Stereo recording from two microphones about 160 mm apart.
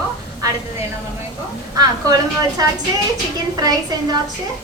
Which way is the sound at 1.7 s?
25° right (ahead or behind).